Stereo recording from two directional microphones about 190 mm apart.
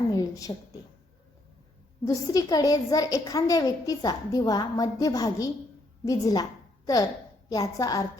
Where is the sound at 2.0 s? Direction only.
20° left (ahead or behind).